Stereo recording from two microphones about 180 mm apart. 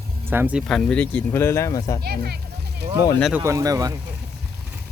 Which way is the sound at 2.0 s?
65° right (ahead or behind).